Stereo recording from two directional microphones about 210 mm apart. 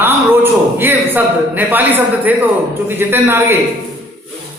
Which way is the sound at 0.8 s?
10° right (ahead or behind).